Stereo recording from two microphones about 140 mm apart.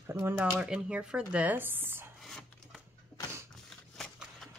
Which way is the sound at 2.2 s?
Centre (ahead or behind).